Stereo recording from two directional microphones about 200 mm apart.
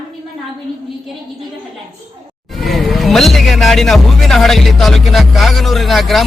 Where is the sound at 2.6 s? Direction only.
Centre (ahead or behind).